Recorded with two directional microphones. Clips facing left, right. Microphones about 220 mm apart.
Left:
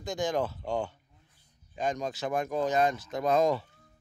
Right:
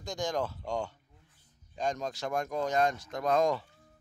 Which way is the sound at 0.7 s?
20° left (ahead or behind).